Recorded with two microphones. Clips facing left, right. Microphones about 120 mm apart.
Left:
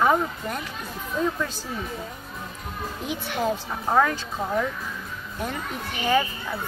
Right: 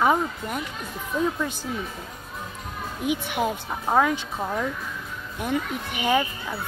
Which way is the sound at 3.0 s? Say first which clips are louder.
Right 4 dB; 15° right (ahead or behind).